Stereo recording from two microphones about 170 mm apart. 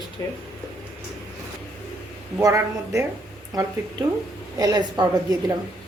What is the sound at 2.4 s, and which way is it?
Speech, 20° right (ahead or behind).